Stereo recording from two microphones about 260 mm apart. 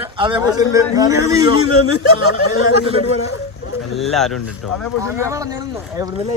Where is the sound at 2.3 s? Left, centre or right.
Left.